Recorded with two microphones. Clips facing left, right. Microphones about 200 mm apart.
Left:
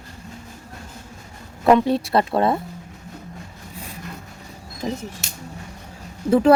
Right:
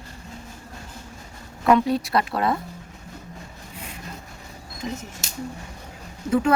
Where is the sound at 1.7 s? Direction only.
25° left (ahead or behind).